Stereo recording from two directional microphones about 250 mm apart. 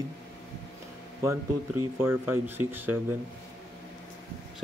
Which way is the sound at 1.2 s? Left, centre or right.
Centre.